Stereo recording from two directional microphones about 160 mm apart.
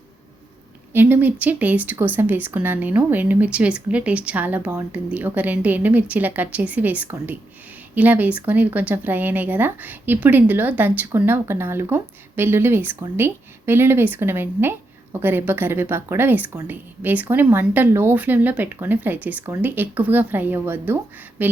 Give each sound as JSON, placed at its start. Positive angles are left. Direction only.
{"t": 0.9, "sound": "speech", "side_deg": -10}